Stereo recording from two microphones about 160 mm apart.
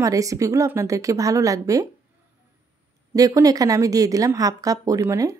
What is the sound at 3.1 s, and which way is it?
Speech, 20° right (ahead or behind).